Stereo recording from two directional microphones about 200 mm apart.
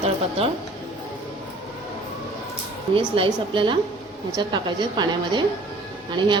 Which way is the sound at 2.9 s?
25° right (ahead or behind).